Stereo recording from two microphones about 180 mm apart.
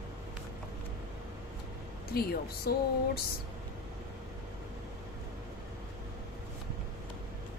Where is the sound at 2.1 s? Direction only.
60° left (ahead or behind).